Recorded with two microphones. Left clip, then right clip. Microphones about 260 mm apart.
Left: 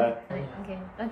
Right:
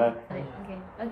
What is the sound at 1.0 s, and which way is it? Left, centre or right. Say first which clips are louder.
Speech: even; centre.